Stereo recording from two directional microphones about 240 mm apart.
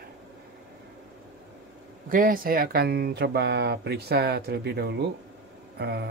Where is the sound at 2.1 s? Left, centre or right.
Right.